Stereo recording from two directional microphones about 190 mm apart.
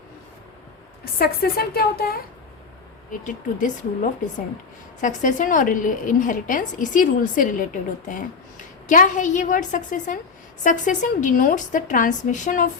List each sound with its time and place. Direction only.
1.0 s a woman's voice: 55° left (ahead or behind)
3.2 s a woman's voice: 45° left (ahead or behind)